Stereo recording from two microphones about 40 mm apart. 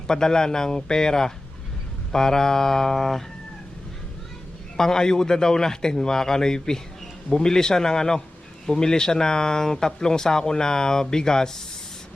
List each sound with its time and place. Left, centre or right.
0.1 s speech: centre
4.8 s speech: centre